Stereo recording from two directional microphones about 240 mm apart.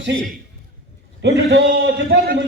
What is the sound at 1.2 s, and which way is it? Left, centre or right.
A man's voice, right.